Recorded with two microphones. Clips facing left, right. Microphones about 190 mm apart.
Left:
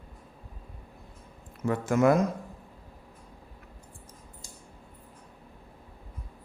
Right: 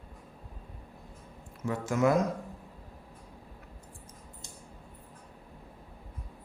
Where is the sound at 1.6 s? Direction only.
55° left (ahead or behind).